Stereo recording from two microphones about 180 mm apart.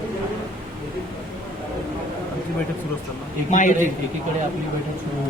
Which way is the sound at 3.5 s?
45° left (ahead or behind).